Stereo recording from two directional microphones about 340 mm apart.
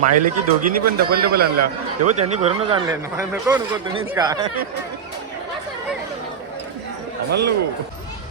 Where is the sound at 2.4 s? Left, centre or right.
Centre.